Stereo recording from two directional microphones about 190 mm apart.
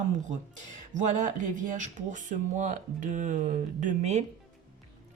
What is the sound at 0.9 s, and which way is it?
Speech, 40° right (ahead or behind).